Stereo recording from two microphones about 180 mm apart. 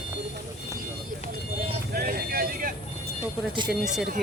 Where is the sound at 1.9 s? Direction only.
60° right (ahead or behind).